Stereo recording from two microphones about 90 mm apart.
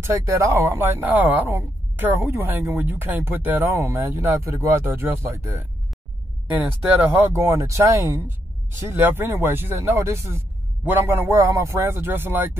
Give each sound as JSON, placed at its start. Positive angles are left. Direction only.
{"t": 0.0, "sound": "speech", "side_deg": -30}
{"t": 6.5, "sound": "speech", "side_deg": -20}
{"t": 7.3, "sound": "speech", "side_deg": -35}
{"t": 11.3, "sound": "speech", "side_deg": -35}